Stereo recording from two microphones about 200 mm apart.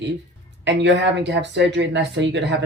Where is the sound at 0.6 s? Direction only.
60° right (ahead or behind).